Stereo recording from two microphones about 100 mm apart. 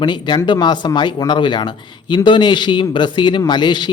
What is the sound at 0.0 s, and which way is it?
A man's voice, 45° left (ahead or behind).